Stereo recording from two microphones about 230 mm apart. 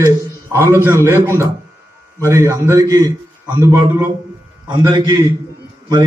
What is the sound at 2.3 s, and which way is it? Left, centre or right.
A man's voice, centre.